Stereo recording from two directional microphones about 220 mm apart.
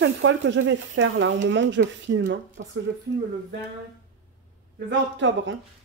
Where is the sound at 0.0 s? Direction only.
55° right (ahead or behind).